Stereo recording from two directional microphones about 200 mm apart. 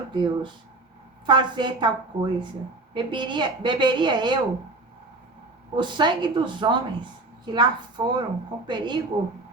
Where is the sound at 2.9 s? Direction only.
25° right (ahead or behind).